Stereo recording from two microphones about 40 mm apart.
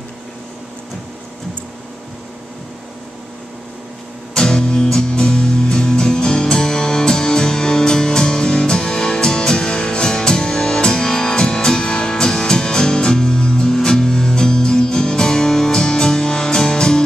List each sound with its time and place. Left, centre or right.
4.3 s music: centre